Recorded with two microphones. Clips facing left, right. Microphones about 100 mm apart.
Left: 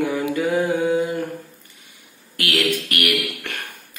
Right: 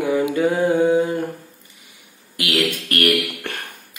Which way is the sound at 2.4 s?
20° right (ahead or behind).